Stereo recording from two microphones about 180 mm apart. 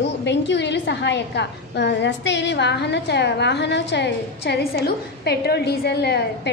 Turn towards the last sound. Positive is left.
turn(degrees=65)  # may be behind; listen again after turning